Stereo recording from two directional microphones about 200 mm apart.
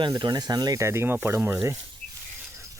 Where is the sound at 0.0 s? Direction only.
20° right (ahead or behind).